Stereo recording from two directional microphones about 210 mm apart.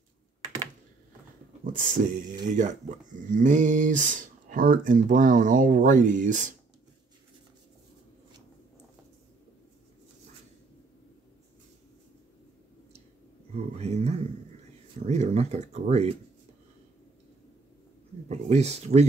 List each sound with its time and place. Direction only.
1.6 s speech: 40° right (ahead or behind)
13.6 s a sound: 30° right (ahead or behind)
15.0 s speech: 30° right (ahead or behind)
18.3 s speech: 30° right (ahead or behind)